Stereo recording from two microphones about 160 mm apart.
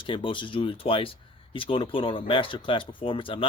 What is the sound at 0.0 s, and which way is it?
Speech, 30° left (ahead or behind).